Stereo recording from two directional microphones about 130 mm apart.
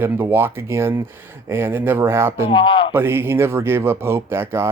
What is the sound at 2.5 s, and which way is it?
Speech, 40° left (ahead or behind).